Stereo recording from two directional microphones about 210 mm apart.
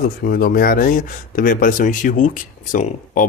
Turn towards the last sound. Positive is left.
turn(degrees=40)  # may be behind; listen again after turning